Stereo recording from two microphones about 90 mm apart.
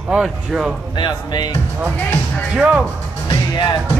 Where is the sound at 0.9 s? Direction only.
55° left (ahead or behind).